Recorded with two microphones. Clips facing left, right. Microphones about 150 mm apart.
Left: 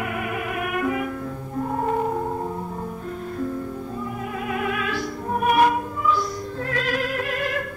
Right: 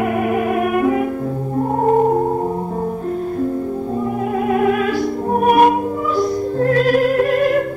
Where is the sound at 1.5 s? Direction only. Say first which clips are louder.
Right 9 dB; 40° right (ahead or behind).